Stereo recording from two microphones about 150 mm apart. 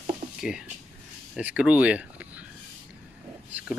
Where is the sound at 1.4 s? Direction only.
10° right (ahead or behind).